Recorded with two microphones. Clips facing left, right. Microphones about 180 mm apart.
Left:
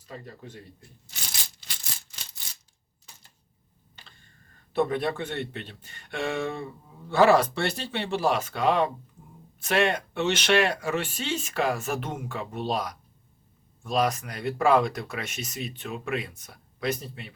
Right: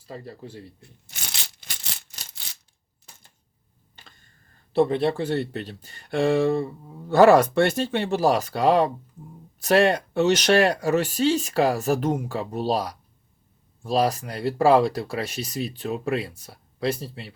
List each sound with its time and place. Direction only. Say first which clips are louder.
0.0 s speech: right 4 dB; 30° right (ahead or behind)
0.8 s a sound: right 2 dB; 65° right (ahead or behind)
4.7 s speech: right 5 dB; 30° right (ahead or behind)
7.1 s speech: right 5 dB; 45° right (ahead or behind)